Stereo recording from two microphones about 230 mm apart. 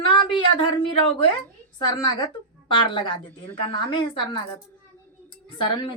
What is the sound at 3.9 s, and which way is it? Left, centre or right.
Speech, left.